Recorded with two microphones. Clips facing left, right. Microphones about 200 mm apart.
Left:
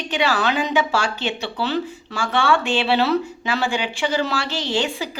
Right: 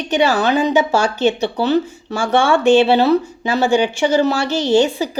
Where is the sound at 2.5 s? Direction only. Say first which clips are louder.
Right 9 dB; 45° right (ahead or behind).